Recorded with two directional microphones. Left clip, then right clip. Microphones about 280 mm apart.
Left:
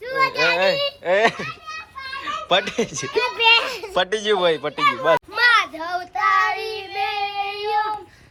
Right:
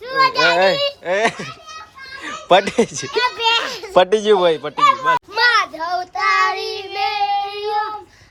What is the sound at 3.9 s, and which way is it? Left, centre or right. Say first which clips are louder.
Speech: right 8 dB; right.